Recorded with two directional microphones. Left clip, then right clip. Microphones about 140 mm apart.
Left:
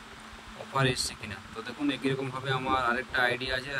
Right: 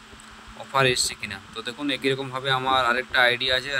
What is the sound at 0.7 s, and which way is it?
Speech, 25° right (ahead or behind).